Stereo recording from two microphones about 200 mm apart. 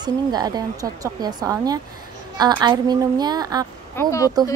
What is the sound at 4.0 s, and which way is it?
Speech, 15° left (ahead or behind).